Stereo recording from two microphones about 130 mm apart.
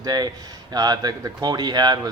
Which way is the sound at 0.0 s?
30° right (ahead or behind).